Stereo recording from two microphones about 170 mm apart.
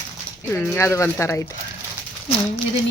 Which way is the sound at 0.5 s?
15° left (ahead or behind).